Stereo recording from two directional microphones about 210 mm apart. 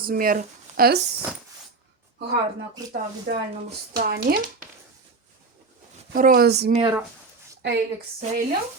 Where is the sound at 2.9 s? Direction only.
50° right (ahead or behind).